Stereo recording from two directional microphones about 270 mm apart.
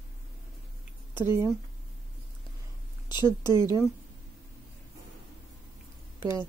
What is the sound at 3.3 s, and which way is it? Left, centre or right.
Speech, centre.